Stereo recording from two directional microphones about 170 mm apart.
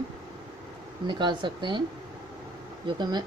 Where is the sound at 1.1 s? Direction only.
25° right (ahead or behind).